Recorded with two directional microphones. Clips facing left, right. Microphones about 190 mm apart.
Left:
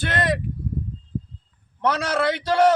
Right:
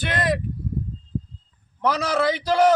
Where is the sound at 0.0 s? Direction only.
Centre (ahead or behind).